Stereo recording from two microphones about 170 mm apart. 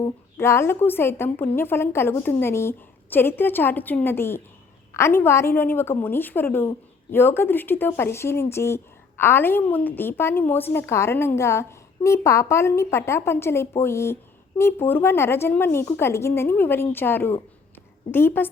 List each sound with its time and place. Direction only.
0.0 s a woman's voice: 15° left (ahead or behind)